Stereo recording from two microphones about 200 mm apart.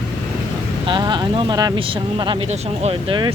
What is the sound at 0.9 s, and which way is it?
Speech, 25° right (ahead or behind).